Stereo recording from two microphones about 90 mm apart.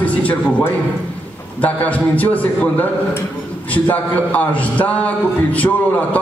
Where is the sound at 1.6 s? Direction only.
15° left (ahead or behind).